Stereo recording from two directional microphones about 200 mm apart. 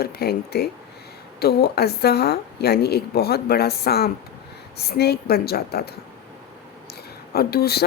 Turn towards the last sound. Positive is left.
turn(degrees=50)  # may be behind; listen again after turning